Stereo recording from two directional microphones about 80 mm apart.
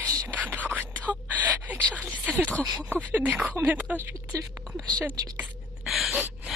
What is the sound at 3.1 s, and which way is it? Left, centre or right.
Speech, centre.